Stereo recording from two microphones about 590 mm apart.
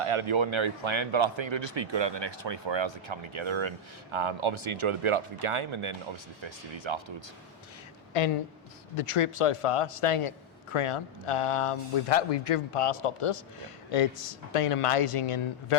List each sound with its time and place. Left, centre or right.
0.0 s speech: right
8.1 s a woman's voice: left